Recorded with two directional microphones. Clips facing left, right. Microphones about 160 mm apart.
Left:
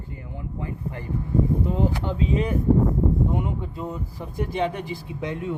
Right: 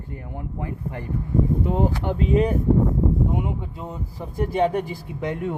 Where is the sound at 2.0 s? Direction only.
55° right (ahead or behind).